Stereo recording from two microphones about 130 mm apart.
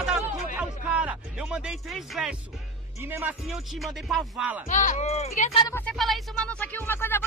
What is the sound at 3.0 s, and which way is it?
Speech, 15° right (ahead or behind).